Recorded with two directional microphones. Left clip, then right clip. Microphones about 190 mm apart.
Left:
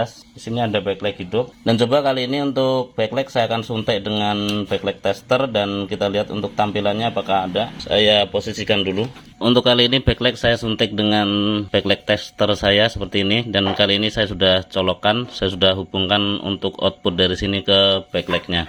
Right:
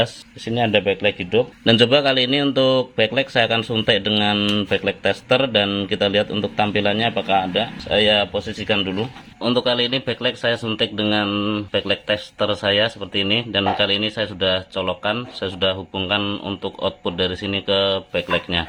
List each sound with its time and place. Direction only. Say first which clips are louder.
0.5 s speech: right 3 dB; 10° right (ahead or behind); by 9.0 s 10° left (ahead or behind)
9.4 s speech: left 4 dB; 20° left (ahead or behind)